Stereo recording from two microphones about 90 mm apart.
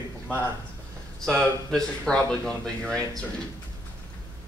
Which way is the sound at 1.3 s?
10° left (ahead or behind).